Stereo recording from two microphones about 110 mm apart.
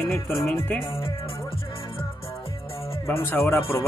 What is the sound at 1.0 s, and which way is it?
Speech, 55° left (ahead or behind).